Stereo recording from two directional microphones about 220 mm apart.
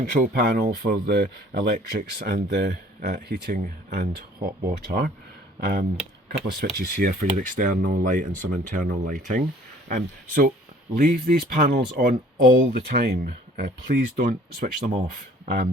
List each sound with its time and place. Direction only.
0.0 s speech: 45° right (ahead or behind)
6.2 s speech: 45° right (ahead or behind)